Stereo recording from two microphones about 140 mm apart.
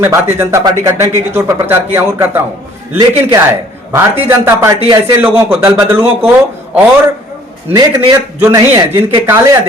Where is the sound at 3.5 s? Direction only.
15° right (ahead or behind).